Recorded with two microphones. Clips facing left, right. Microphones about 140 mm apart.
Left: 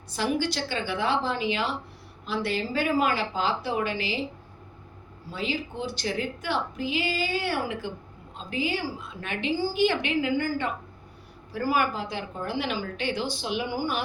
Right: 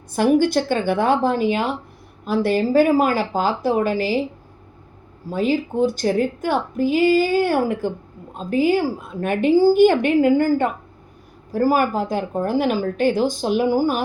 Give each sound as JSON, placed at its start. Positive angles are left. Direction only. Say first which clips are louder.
{"t": 0.1, "sound": "a woman's voice", "louder": "right 11 dB", "side_deg": -50}
{"t": 5.3, "sound": "a woman's voice", "louder": "right 11 dB", "side_deg": -45}